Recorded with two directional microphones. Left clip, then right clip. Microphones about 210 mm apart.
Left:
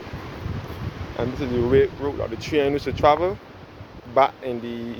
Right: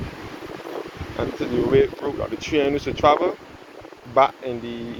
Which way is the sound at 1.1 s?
15° left (ahead or behind).